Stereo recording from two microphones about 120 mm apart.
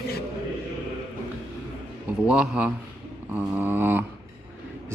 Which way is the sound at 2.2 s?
10° right (ahead or behind).